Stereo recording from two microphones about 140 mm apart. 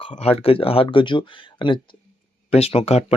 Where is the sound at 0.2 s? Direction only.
45° left (ahead or behind).